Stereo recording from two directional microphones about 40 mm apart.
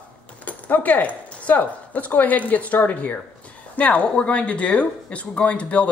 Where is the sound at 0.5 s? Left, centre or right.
Left.